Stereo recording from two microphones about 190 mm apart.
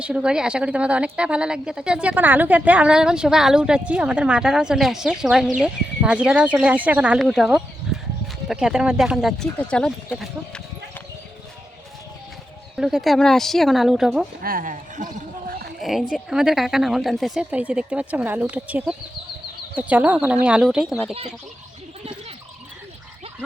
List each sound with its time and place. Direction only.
0.0 s a woman's voice: 5° right (ahead or behind)
7.9 s a sound: centre (ahead or behind)
8.4 s a woman's voice: 5° right (ahead or behind)
12.7 s a woman's voice: centre (ahead or behind)
14.4 s speech: 45° right (ahead or behind)
15.8 s a woman's voice: centre (ahead or behind)